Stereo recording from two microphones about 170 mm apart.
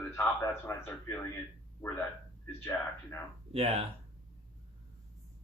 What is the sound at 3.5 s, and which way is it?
Speech, 35° right (ahead or behind).